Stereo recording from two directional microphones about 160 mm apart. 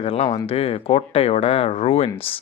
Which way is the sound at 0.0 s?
35° left (ahead or behind).